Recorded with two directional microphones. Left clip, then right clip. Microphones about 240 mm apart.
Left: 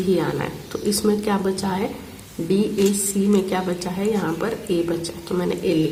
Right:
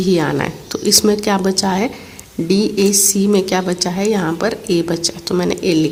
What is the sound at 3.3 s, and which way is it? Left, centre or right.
A woman's voice, right.